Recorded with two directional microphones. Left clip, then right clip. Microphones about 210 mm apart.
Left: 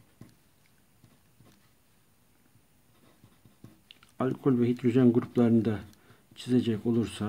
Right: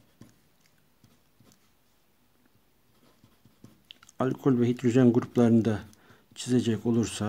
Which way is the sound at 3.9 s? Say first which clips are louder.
Right 2 dB; 20° right (ahead or behind).